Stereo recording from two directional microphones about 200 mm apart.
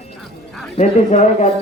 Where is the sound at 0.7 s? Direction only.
35° left (ahead or behind).